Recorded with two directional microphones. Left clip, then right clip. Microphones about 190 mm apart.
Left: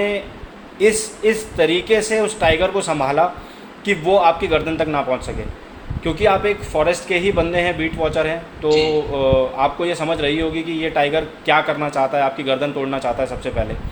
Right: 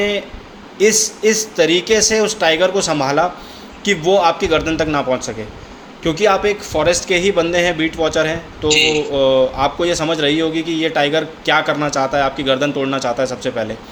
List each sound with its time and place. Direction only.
1.2 s speech: 40° right (ahead or behind)